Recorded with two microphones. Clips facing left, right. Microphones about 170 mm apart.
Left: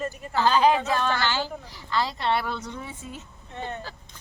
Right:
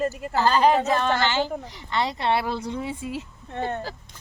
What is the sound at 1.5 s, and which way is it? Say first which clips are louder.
Speech: right 6 dB; 50° right (ahead or behind).